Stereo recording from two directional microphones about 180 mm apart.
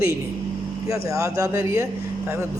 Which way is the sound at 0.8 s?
15° right (ahead or behind).